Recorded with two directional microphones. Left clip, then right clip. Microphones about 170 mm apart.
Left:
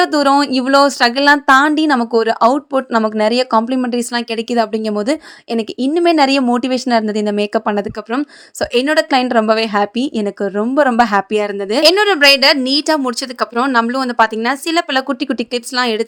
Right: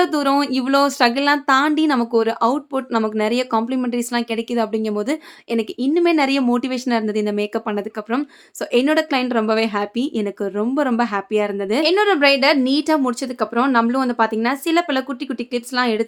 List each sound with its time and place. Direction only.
0.0 s a woman's voice: 25° left (ahead or behind)